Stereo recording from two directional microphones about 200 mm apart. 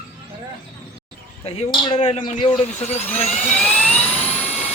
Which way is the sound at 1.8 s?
30° left (ahead or behind).